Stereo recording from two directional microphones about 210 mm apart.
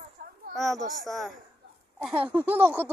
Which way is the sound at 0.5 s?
Centre (ahead or behind).